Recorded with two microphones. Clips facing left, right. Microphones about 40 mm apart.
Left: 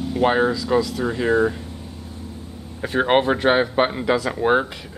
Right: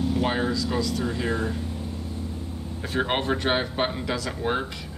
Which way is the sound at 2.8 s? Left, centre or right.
Left.